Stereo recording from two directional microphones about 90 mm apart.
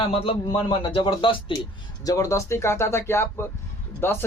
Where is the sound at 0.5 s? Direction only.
60° left (ahead or behind).